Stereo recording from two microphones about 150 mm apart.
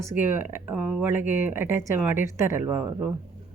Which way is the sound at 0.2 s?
15° right (ahead or behind).